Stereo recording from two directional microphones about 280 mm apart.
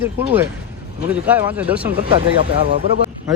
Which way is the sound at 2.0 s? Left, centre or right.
Centre.